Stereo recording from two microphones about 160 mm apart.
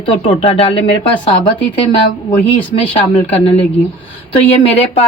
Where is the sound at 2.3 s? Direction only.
30° left (ahead or behind).